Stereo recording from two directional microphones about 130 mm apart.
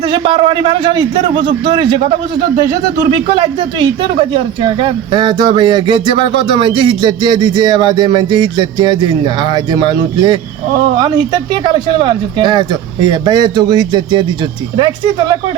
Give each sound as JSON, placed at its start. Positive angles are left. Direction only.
{"t": 0.1, "sound": "speech", "side_deg": -40}